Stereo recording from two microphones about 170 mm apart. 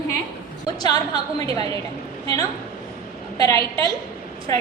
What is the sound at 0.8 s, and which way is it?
Speech, 25° left (ahead or behind).